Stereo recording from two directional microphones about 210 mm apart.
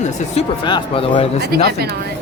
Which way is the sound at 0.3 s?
25° left (ahead or behind).